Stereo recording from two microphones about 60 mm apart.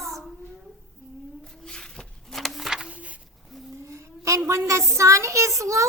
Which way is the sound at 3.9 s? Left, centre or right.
Right.